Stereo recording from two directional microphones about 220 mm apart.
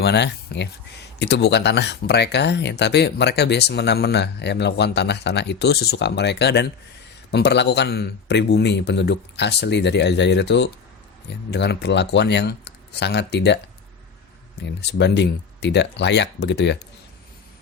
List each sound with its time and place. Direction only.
0.0 s speech: 50° left (ahead or behind)
14.6 s speech: 50° left (ahead or behind)